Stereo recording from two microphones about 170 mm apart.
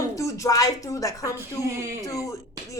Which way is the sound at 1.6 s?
15° right (ahead or behind).